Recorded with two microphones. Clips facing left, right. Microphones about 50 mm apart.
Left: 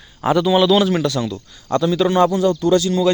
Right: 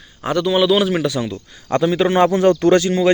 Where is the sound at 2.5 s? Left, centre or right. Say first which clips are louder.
Right 2 dB; right.